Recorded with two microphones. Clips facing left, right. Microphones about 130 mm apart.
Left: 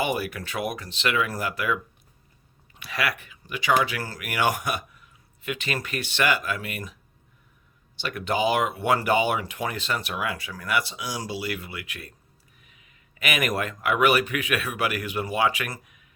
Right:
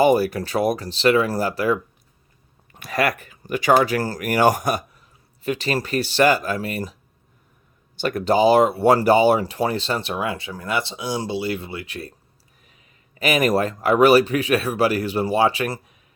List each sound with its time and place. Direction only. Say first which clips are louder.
0.0 s speech: right 10 dB; 35° right (ahead or behind)
2.7 s speech: right 7 dB; 45° right (ahead or behind)
7.9 s speech: right 8 dB; 40° right (ahead or behind)